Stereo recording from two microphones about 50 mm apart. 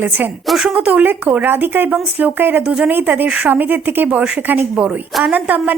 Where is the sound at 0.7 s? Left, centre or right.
Right.